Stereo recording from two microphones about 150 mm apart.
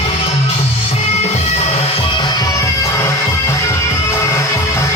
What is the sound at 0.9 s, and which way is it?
Music, 45° left (ahead or behind).